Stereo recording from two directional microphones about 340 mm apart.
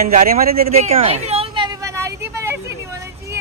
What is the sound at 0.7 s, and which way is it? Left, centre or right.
Vehicle, centre.